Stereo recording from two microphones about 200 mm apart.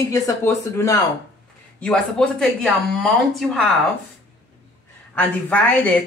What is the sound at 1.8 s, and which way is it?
Speech, 5° left (ahead or behind).